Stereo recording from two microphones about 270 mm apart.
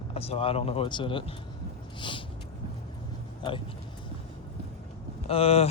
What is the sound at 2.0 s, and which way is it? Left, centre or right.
Vehicle, centre.